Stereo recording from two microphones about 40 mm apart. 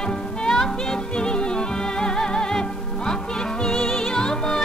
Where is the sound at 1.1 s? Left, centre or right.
Left.